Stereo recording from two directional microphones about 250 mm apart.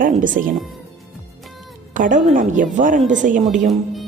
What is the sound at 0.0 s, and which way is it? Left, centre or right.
Speech, right.